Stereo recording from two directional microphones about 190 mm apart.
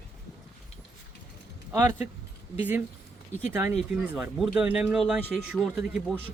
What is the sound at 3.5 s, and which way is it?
Speech, 10° right (ahead or behind).